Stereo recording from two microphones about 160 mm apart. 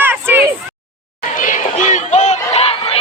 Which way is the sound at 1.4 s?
55° left (ahead or behind).